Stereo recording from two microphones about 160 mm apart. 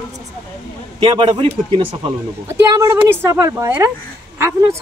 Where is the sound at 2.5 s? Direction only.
20° right (ahead or behind).